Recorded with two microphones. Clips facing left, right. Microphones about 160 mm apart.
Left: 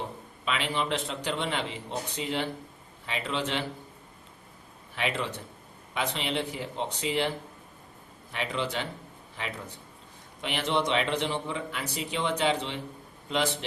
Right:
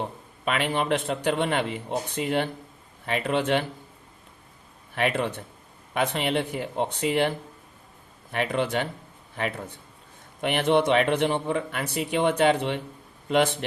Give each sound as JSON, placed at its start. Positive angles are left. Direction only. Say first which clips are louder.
{"t": 0.4, "sound": "speech", "louder": "right 5 dB", "side_deg": -55}
{"t": 4.9, "sound": "a man's voice", "louder": "right 6 dB", "side_deg": -55}